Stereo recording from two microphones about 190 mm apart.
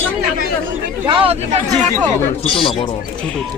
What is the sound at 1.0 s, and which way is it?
Speech, 25° right (ahead or behind).